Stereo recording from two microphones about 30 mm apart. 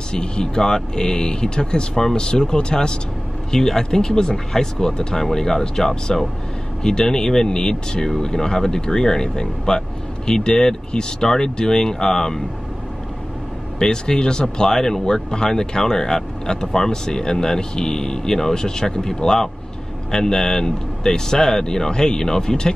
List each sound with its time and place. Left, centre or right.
0.1 s speech: left
13.7 s speech: left
14.8 s speech: centre